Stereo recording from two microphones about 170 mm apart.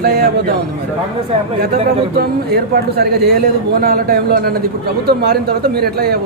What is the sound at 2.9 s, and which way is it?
A man's voice, 65° right (ahead or behind).